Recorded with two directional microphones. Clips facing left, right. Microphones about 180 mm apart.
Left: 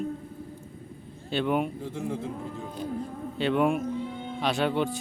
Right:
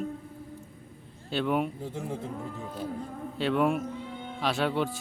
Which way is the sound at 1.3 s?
Centre (ahead or behind).